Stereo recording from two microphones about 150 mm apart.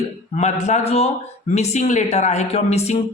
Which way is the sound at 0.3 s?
50° left (ahead or behind).